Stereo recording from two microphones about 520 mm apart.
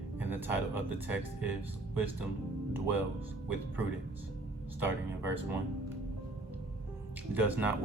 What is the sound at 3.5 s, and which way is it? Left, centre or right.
Speech, centre.